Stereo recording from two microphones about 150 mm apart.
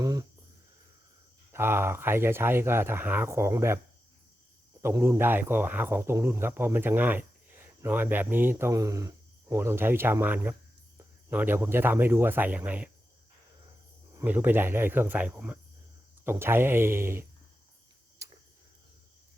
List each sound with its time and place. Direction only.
0.0 s a sound: 25° right (ahead or behind)
1.5 s speech: 15° right (ahead or behind)
4.8 s speech: 15° right (ahead or behind)
14.2 s speech: 10° right (ahead or behind)
18.2 s cricket: 20° right (ahead or behind)